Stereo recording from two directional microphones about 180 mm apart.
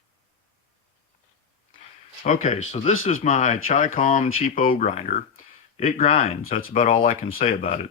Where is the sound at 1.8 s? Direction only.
45° left (ahead or behind).